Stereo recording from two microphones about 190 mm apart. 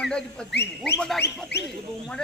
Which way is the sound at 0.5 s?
60° left (ahead or behind).